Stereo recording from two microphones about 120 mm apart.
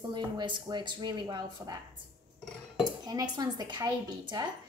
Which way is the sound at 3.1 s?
35° right (ahead or behind).